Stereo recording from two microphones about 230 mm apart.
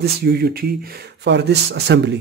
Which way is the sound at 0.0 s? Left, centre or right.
Right.